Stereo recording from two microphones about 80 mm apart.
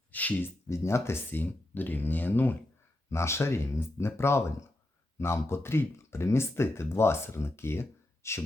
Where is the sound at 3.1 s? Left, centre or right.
Left.